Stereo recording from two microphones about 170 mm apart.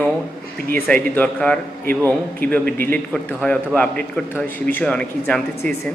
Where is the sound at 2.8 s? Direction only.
10° left (ahead or behind).